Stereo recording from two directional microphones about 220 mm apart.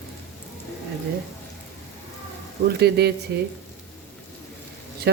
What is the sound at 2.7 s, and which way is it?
Speech, 50° right (ahead or behind).